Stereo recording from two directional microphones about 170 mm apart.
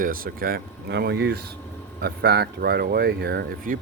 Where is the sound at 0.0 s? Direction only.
55° right (ahead or behind).